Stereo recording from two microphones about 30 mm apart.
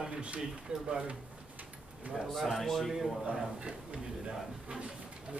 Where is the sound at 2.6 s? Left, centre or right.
Centre.